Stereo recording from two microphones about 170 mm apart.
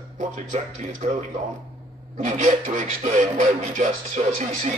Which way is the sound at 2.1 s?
45° right (ahead or behind).